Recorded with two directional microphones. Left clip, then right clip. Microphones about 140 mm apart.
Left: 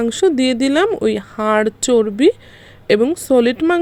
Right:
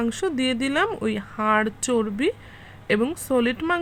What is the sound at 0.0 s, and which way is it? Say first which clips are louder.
Speech: left 9 dB; 30° left (ahead or behind).